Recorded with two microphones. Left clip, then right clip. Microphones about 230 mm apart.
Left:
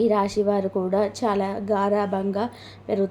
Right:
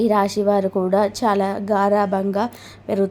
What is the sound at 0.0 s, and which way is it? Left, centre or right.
A woman's voice, centre.